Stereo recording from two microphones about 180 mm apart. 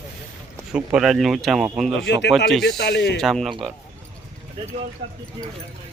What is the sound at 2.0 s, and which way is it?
Speech, 75° left (ahead or behind).